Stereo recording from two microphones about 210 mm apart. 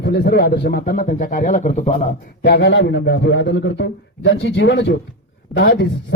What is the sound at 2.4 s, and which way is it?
A man's voice, 55° left (ahead or behind).